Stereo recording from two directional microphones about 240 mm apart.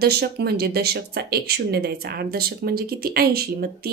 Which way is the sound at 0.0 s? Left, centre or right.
Right.